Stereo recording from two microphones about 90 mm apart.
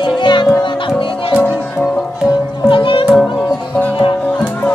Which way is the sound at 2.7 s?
65° left (ahead or behind).